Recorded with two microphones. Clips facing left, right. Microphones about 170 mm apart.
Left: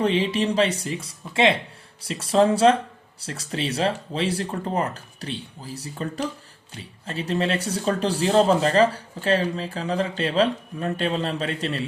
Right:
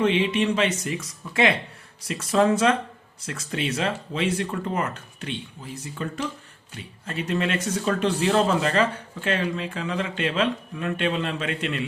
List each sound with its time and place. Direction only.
0.0 s speech: 35° left (ahead or behind)